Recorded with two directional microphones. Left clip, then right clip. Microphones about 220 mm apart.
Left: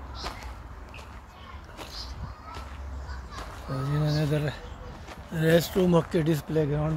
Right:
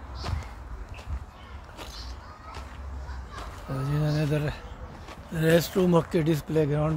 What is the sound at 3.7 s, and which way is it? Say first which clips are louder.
Speech: even; 10° right (ahead or behind).